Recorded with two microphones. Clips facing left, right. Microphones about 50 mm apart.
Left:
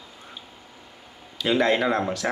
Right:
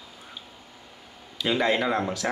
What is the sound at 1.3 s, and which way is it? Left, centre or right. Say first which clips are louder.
Speech: left 3 dB; centre.